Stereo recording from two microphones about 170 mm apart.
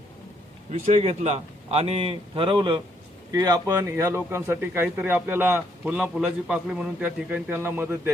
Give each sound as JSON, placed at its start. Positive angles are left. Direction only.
{"t": 0.7, "sound": "a man's voice", "side_deg": -40}